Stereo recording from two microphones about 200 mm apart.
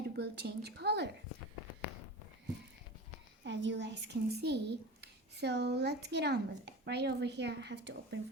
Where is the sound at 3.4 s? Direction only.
65° right (ahead or behind).